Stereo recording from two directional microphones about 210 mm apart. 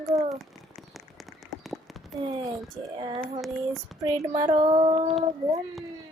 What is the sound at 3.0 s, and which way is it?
Speech, 25° right (ahead or behind).